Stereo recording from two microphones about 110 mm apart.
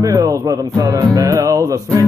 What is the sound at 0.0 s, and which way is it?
Music, 30° right (ahead or behind).